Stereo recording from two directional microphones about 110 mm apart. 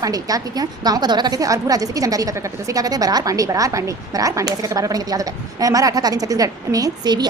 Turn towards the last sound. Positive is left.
turn(degrees=-35)  # may be behind; listen again after turning